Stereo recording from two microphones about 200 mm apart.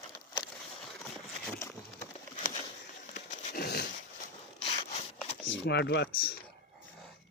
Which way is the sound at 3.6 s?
50° left (ahead or behind).